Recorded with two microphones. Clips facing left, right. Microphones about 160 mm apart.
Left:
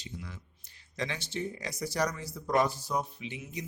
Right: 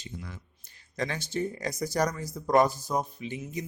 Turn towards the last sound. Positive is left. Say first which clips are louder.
# right 5 dB
turn(degrees=-45)  # may be behind; listen again after turning